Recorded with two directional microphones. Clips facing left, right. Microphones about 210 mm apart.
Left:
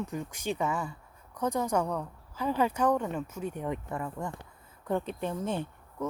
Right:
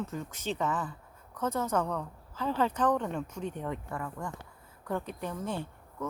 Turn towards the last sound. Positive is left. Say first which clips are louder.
# left 3 dB
turn(degrees=20)  # may be behind; listen again after turning